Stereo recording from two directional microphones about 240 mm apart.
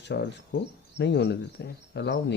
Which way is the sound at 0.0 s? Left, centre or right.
Left.